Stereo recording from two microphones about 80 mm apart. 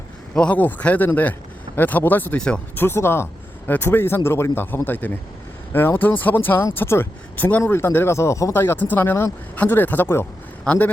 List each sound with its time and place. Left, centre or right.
0.3 s speech: centre; by 8.5 s left
8.5 s speech: left